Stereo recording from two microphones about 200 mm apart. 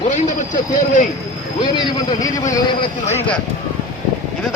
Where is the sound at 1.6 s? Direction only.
20° left (ahead or behind).